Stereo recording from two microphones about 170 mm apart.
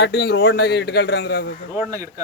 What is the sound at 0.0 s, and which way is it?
Speech, 75° left (ahead or behind).